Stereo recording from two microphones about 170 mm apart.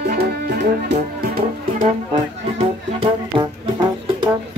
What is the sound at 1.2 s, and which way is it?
Music, 55° right (ahead or behind).